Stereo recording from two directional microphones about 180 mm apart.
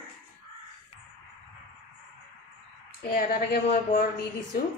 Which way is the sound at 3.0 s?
50° left (ahead or behind).